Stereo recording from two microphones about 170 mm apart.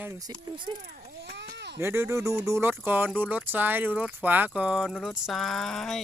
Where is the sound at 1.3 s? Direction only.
80° right.